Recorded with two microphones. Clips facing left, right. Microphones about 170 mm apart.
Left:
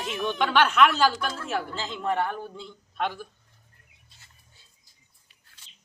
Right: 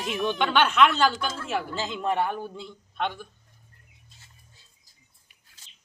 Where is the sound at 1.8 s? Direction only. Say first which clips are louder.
Right 2 dB; 15° right (ahead or behind).